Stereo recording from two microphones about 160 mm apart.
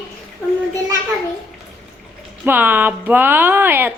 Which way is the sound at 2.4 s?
10° right (ahead or behind).